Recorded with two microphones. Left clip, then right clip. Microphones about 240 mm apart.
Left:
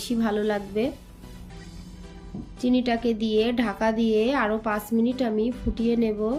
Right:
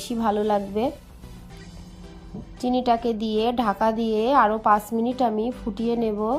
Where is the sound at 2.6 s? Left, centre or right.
Right.